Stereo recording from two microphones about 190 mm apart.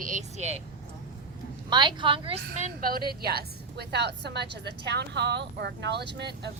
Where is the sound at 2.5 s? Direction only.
45° right (ahead or behind).